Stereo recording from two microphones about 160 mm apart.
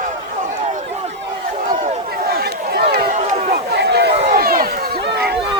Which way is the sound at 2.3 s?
80° right.